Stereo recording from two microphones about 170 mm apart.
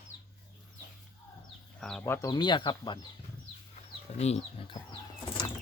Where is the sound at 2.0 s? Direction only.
20° left (ahead or behind).